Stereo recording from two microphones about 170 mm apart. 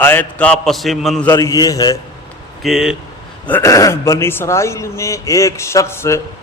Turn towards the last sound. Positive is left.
turn(degrees=15)  # may be behind; listen again after turning